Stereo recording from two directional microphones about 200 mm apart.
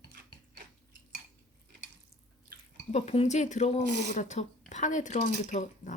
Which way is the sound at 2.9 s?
30° left (ahead or behind).